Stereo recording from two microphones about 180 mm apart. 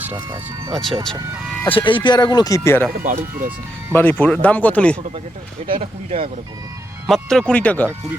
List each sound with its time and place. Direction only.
0.3 s speech: 25° right (ahead or behind)
1.7 s speech: 25° left (ahead or behind)
3.0 s speech: 50° right (ahead or behind)
3.9 s speech: 10° left (ahead or behind)
5.6 s speech: 30° right (ahead or behind)
7.1 s speech: centre (ahead or behind)